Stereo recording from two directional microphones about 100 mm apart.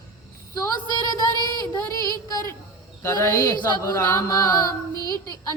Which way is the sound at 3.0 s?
25° left (ahead or behind).